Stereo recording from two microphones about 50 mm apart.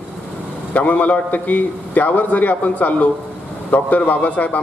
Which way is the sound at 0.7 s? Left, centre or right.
Left.